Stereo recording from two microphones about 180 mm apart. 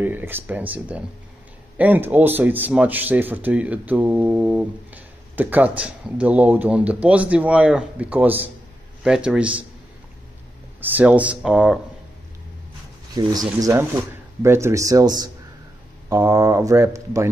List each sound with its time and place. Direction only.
0.0 s speech: 10° right (ahead or behind)
10.8 s speech: 10° right (ahead or behind)
13.2 s speech: 20° right (ahead or behind)